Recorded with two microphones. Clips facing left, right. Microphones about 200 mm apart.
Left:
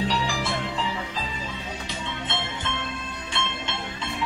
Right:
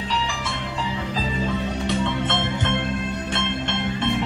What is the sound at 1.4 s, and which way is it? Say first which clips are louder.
Music: right 10 dB; 65° right (ahead or behind).